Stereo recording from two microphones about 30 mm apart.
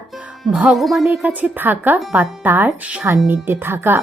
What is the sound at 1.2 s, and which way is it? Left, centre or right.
Speech, right.